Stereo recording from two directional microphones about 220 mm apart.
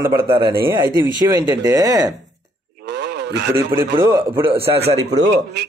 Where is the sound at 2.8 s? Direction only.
50° right (ahead or behind).